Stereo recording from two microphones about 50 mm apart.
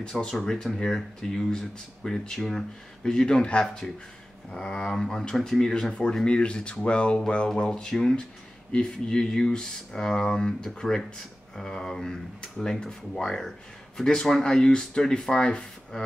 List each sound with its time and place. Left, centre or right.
0.0 s speech: centre